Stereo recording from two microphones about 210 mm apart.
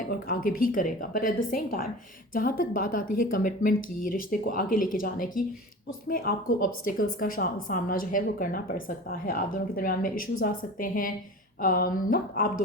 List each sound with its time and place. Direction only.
0.3 s a woman's voice: 45° left (ahead or behind)